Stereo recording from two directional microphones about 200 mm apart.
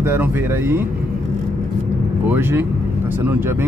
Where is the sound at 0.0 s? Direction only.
10° right (ahead or behind).